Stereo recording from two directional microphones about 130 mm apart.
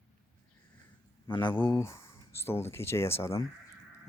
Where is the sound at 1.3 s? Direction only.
35° left (ahead or behind).